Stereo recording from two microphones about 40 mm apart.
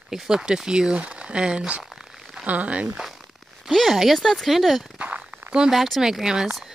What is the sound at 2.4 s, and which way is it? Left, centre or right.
Speech, right.